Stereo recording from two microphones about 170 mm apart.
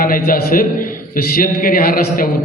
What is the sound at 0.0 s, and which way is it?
A man's voice, 55° left (ahead or behind).